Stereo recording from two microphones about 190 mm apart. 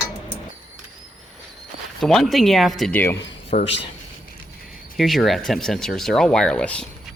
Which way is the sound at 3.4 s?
30° left (ahead or behind).